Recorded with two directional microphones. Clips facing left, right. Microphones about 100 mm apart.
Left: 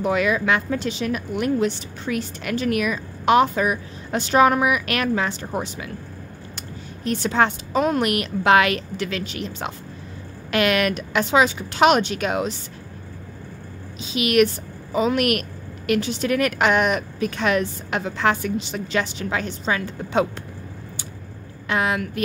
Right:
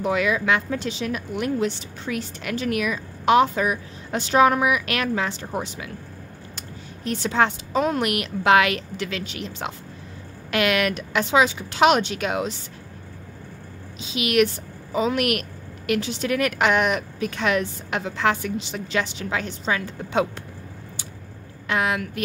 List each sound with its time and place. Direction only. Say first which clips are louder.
0.1 s speech: left 1 dB; 45° left (ahead or behind)
7.1 s speech: left 1 dB; 50° left (ahead or behind)
13.9 s speech: left 2 dB; 45° left (ahead or behind)
21.6 s a woman's voice: left 1 dB; 30° left (ahead or behind)